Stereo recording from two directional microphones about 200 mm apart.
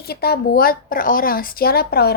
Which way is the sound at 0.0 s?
50° left (ahead or behind).